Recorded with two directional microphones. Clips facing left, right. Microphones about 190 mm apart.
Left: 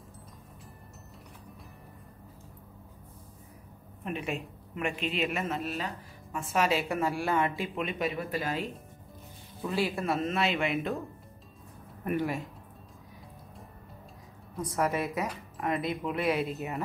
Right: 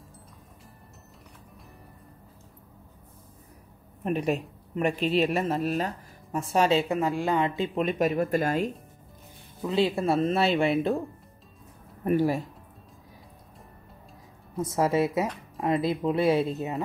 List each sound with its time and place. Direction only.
4.0 s a woman's voice: 40° right (ahead or behind); by 7.7 s 20° right (ahead or behind)
7.7 s speech: 45° right (ahead or behind)
9.6 s a woman's voice: 20° right (ahead or behind)
12.0 s speech: 35° right (ahead or behind)
14.6 s a woman's voice: 30° right (ahead or behind)